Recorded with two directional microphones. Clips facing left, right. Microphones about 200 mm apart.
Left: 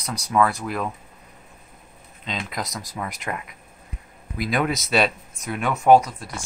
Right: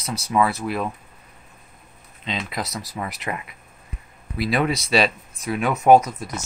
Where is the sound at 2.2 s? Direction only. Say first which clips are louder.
Right 2 dB; 5° right (ahead or behind).